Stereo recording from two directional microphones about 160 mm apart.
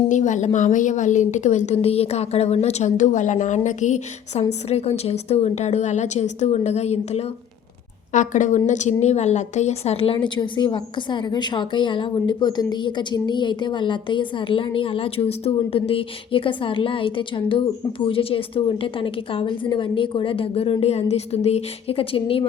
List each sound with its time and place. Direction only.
0.1 s a woman's voice: 50° left (ahead or behind)